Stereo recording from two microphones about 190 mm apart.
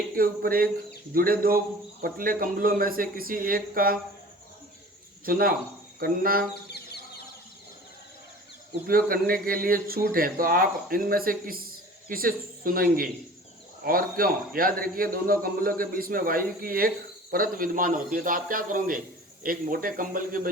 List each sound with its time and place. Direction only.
0.2 s a man's voice: 50° right (ahead or behind)
5.2 s a man's voice: 50° right (ahead or behind)
6.5 s bird: 60° left (ahead or behind)
8.9 s a man's voice: 50° right (ahead or behind)